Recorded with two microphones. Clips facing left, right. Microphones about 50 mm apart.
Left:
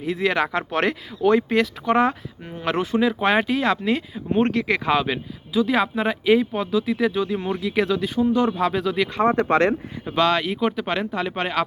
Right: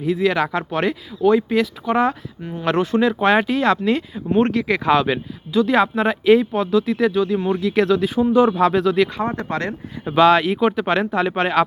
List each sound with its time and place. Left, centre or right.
0.0 s speech: left
0.7 s speech: left
2.6 s speech: centre
4.5 s speech: left
4.9 s speech: centre
7.1 s speech: centre
7.6 s speech: centre
8.0 s speech: centre
8.5 s speech: centre
9.2 s speech: left
10.2 s speech: centre